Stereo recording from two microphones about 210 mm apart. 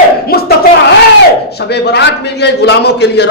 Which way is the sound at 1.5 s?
50° left (ahead or behind).